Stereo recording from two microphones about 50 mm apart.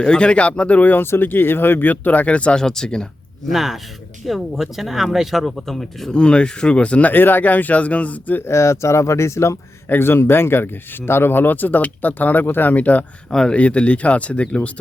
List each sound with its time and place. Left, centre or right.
0.0 s speech: centre; by 1.0 s left
1.0 s speech: left
2.6 s speech: centre
3.5 s speech: centre
6.1 s speech: centre
7.1 s speech: left
8.4 s speech: left
9.9 s speech: left
12.7 s speech: left
13.3 s speech: centre
13.6 s speech: left